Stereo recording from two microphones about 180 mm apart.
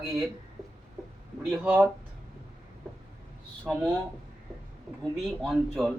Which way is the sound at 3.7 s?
5° right (ahead or behind).